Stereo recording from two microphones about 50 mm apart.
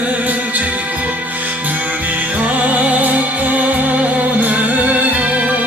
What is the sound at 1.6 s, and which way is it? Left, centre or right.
Music, right.